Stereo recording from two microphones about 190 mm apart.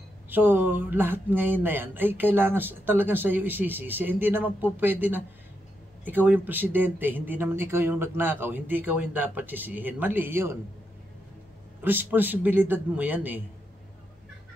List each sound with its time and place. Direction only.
0.3 s speech: 10° right (ahead or behind)
11.8 s speech: 10° right (ahead or behind)